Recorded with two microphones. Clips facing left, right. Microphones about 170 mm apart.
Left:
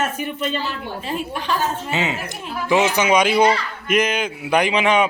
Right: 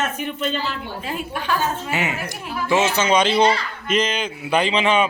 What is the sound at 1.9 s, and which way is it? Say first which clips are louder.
A man's voice: left 1 dB; 20° left (ahead or behind).